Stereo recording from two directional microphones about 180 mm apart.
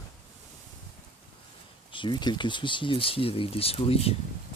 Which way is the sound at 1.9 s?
25° left (ahead or behind).